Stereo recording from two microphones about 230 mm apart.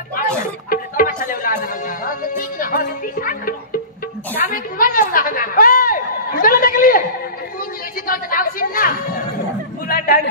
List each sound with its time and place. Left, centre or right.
0.7 s music: left
4.5 s a woman's voice: left
6.4 s a sound: left
8.1 s a woman's voice: left